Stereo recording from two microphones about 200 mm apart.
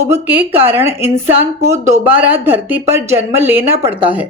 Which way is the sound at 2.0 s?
10° right (ahead or behind).